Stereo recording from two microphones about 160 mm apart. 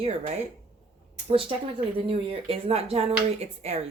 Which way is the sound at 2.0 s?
35° right (ahead or behind).